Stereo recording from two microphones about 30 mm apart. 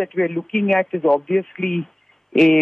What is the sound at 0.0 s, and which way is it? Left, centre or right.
Speech, centre.